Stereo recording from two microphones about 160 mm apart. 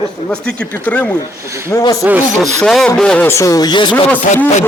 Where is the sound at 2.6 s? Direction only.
5° left (ahead or behind).